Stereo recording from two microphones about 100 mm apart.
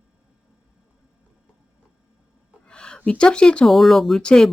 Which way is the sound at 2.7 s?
10° left (ahead or behind).